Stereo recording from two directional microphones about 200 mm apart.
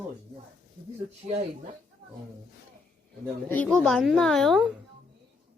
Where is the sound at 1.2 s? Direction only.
40° right (ahead or behind).